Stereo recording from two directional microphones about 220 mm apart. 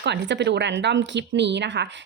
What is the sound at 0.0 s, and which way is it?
Speech, 50° right (ahead or behind).